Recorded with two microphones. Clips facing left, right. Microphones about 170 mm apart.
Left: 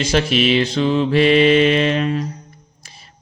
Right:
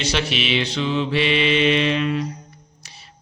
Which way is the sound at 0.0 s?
45° left (ahead or behind).